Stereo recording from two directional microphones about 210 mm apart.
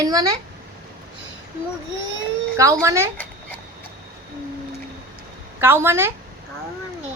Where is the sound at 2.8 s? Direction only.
15° right (ahead or behind).